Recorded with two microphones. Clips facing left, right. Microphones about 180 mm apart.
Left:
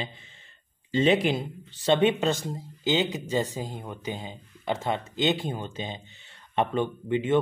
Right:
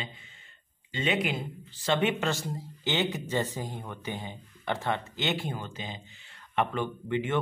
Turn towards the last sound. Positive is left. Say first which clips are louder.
# left 4 dB
turn(degrees=20)  # may be behind; listen again after turning